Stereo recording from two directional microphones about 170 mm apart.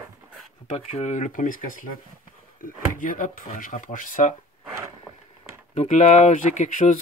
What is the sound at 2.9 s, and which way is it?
Speech, 55° left (ahead or behind).